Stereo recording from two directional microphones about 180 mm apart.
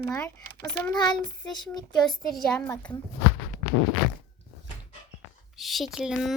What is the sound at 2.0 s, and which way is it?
Speech, centre (ahead or behind).